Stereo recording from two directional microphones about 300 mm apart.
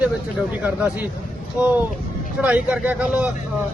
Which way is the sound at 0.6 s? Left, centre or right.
Centre.